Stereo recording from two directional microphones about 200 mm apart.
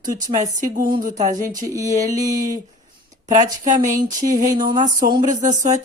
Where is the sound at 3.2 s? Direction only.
35° right (ahead or behind).